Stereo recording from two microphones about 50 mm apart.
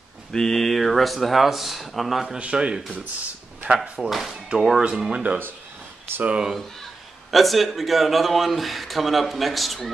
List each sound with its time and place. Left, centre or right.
0.3 s speech: centre
2.3 s speech: centre
4.6 s speech: centre
6.2 s speech: right
7.2 s speech: centre